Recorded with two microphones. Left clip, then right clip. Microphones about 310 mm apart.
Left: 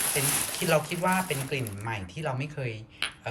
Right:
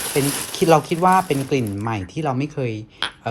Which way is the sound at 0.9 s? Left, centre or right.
Centre.